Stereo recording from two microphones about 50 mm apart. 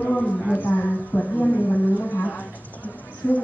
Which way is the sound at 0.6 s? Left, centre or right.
Left.